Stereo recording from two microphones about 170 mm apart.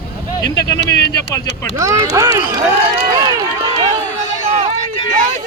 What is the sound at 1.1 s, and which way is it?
Speech, 20° left (ahead or behind).